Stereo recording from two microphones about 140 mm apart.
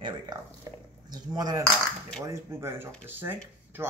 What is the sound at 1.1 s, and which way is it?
Speech, 30° right (ahead or behind).